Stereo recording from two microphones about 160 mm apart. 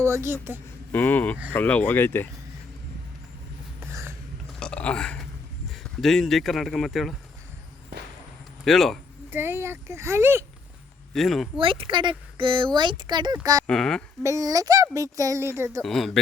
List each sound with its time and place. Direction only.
0.0 s speech: 15° right (ahead or behind)
0.9 s speech: 10° left (ahead or behind)
4.6 s a sound: 5° left (ahead or behind)
5.8 s speech: centre (ahead or behind)
8.6 s speech: centre (ahead or behind)
9.3 s speech: 15° right (ahead or behind)
11.1 s speech: centre (ahead or behind)
11.5 s speech: 35° right (ahead or behind)
13.7 s speech: 5° left (ahead or behind)
14.2 s speech: 20° right (ahead or behind)
15.8 s speech: centre (ahead or behind)